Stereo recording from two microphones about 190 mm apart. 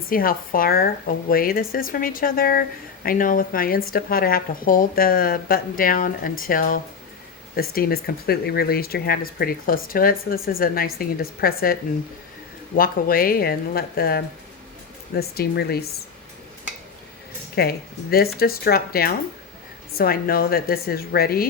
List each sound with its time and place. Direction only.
0.1 s speech: 50° left (ahead or behind)
17.5 s speech: 55° left (ahead or behind)